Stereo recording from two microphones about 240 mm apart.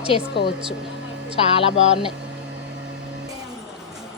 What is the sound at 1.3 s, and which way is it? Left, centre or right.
Speech, left.